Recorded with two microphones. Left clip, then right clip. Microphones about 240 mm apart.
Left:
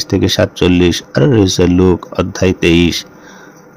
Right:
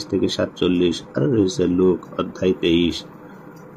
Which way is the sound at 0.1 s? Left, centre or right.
Left.